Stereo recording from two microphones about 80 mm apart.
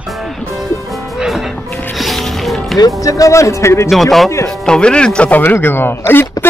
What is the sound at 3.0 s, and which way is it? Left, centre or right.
Speech, left.